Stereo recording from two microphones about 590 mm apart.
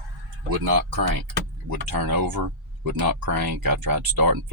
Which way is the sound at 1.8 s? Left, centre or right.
Right.